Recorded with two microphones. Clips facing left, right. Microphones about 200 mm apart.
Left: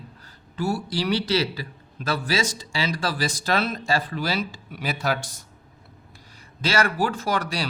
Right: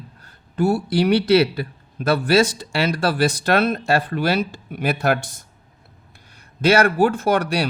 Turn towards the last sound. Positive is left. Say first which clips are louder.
# right 7 dB
turn(degrees=-60)  # may be behind; listen again after turning